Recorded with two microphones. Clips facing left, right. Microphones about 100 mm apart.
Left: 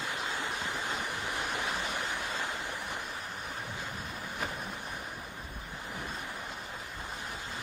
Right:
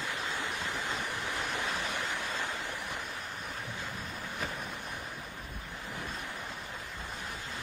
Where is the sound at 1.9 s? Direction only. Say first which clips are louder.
Even; 15° left (ahead or behind).